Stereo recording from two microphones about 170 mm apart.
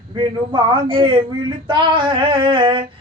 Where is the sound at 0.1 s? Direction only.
25° right (ahead or behind).